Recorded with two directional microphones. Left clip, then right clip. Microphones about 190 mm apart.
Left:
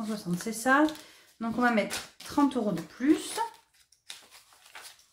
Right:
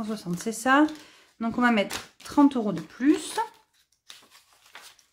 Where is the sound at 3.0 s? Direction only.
45° right (ahead or behind).